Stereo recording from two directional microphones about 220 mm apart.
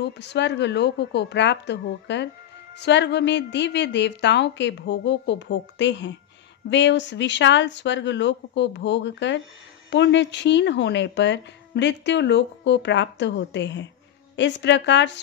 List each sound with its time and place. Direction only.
0.0 s speech: 50° left (ahead or behind)